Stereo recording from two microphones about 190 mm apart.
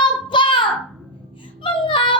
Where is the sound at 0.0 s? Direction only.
25° left (ahead or behind).